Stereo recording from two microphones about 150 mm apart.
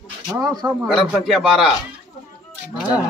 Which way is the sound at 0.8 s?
5° right (ahead or behind).